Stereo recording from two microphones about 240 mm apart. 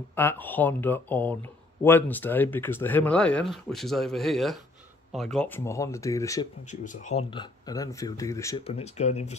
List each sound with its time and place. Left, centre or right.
0.1 s speech: centre
6.7 s speech: left; by 8.6 s centre
8.6 s speech: left